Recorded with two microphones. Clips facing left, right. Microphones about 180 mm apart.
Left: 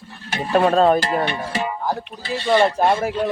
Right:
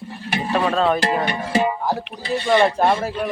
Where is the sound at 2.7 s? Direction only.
15° left (ahead or behind).